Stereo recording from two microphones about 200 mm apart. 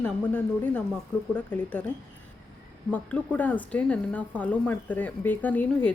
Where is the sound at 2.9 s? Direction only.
10° left (ahead or behind).